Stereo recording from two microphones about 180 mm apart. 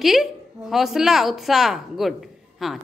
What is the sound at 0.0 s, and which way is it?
A woman's voice, centre (ahead or behind).